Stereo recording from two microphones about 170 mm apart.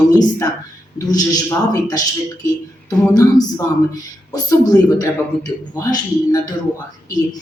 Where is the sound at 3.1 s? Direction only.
20° left (ahead or behind).